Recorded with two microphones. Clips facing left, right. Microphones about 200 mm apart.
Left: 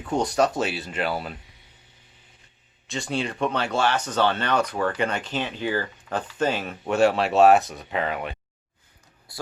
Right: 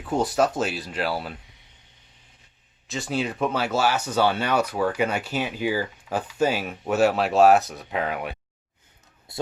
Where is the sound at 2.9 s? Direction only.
Centre (ahead or behind).